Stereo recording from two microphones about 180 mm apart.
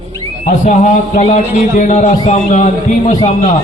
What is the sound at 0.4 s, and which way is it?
A man's voice, 40° left (ahead or behind).